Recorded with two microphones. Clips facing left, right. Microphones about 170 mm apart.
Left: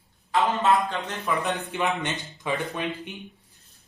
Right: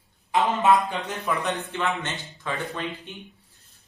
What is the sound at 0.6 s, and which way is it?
Speech, 20° right (ahead or behind).